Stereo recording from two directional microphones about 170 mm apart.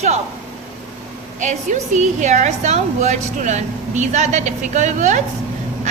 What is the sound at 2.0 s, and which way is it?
A woman's voice, 45° right (ahead or behind).